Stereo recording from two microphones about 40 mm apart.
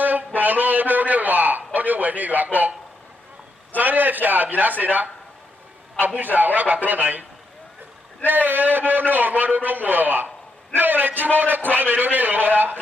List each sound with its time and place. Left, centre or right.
0.0 s a sound: right
3.7 s a man's voice: right
8.3 s a man's voice: right